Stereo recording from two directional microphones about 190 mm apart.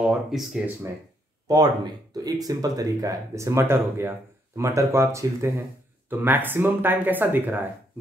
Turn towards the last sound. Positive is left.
turn(degrees=-10)  # may be behind; listen again after turning